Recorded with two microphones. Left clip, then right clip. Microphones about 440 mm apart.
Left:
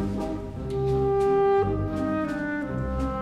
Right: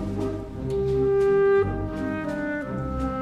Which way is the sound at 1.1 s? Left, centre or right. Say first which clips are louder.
Right 2 dB; right.